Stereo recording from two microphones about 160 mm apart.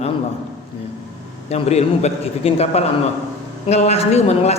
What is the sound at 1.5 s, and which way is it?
A woman's voice, 40° left (ahead or behind).